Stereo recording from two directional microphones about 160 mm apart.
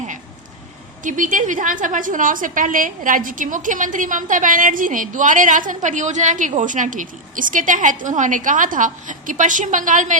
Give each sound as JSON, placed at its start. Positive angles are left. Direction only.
{"t": 1.0, "sound": "a woman's voice", "side_deg": -55}